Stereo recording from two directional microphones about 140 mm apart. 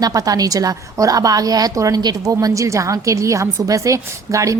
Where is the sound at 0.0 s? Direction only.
25° right (ahead or behind).